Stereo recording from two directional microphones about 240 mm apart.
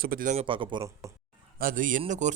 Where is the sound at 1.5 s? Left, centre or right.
Right.